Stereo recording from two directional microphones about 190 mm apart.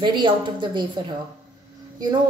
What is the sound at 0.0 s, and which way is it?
A woman's voice, 25° right (ahead or behind).